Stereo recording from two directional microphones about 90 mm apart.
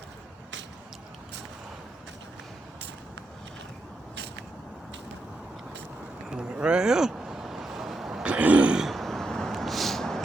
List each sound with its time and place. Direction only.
6.3 s vehicle: 10° right (ahead or behind)